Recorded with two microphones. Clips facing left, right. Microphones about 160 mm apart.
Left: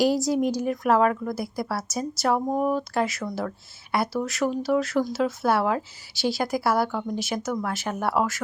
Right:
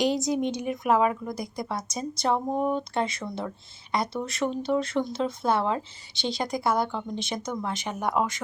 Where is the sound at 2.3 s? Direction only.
Centre (ahead or behind).